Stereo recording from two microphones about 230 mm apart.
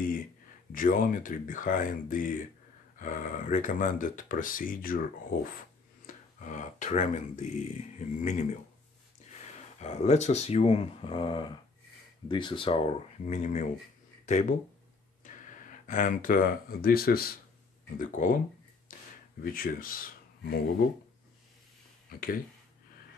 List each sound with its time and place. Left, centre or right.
0.7 s speech: left
6.0 s speech: left
15.2 s speech: left
19.4 s speech: left
22.1 s speech: left